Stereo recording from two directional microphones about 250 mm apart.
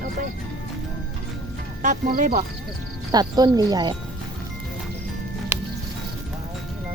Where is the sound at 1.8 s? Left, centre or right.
Right.